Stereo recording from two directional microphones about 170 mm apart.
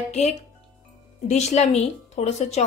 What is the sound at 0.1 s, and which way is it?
A woman's voice, 40° left (ahead or behind).